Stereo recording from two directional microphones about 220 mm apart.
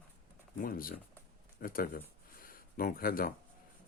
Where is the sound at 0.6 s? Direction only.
40° left (ahead or behind).